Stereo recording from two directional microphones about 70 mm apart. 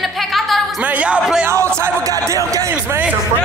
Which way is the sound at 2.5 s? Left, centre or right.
Right.